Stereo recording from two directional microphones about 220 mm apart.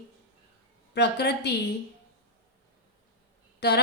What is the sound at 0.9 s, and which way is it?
Speech, 50° left (ahead or behind).